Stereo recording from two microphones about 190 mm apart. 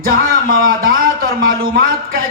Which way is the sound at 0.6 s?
50° right (ahead or behind).